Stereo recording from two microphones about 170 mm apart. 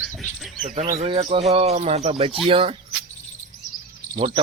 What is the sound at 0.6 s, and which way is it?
Speech, 40° right (ahead or behind).